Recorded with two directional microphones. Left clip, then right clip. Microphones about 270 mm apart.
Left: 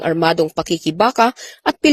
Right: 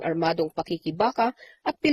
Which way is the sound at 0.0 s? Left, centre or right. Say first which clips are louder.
Left 9 dB; left.